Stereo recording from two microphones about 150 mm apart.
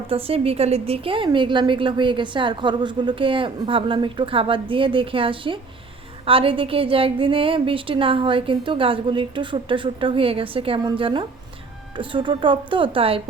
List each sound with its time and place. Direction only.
0.1 s a woman's voice: 40° right (ahead or behind)